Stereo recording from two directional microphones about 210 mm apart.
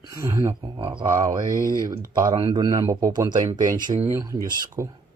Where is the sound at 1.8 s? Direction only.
15° right (ahead or behind).